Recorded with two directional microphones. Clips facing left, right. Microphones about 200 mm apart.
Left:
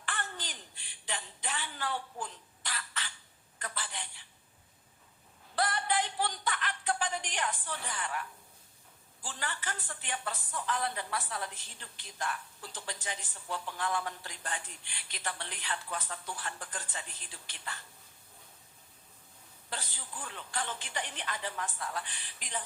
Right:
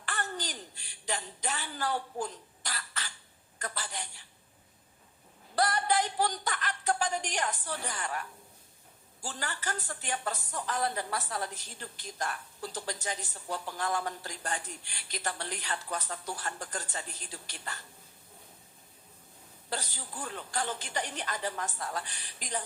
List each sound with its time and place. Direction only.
0.0 s a sound: 40° right (ahead or behind)
3.6 s speech: 40° right (ahead or behind)
5.5 s speech: 40° right (ahead or behind)
19.7 s speech: 40° right (ahead or behind)